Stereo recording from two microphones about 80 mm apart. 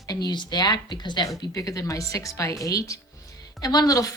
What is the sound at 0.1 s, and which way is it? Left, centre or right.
Speech, left.